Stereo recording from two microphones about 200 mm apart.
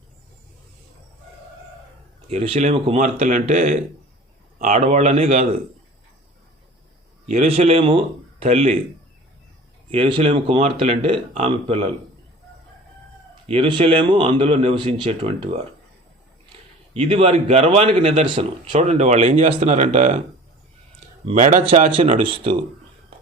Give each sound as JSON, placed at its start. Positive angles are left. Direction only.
{"t": 2.3, "sound": "a man's voice", "side_deg": -30}
{"t": 7.3, "sound": "speech", "side_deg": -35}
{"t": 9.9, "sound": "speech", "side_deg": -25}
{"t": 13.5, "sound": "speech", "side_deg": -30}
{"t": 16.9, "sound": "a man's voice", "side_deg": -30}
{"t": 21.2, "sound": "speech", "side_deg": -40}